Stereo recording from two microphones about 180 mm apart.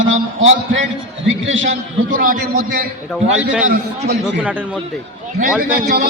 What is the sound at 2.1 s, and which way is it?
Speech, 50° right (ahead or behind).